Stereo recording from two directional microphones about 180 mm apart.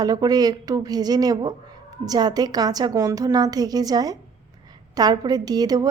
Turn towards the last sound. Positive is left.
turn(degrees=-20)  # may be behind; listen again after turning